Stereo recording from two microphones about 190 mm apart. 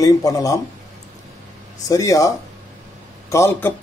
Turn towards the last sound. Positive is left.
turn(degrees=10)  # may be behind; listen again after turning